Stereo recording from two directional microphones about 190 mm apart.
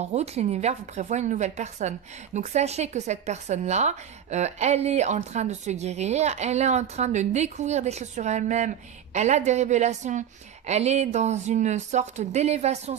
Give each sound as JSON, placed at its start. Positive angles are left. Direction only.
{"t": 0.0, "sound": "speech", "side_deg": -35}